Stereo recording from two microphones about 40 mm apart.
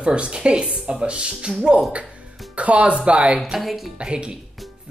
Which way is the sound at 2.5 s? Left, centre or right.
Right.